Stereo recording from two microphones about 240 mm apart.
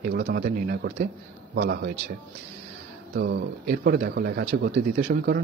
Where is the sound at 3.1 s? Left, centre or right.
Right.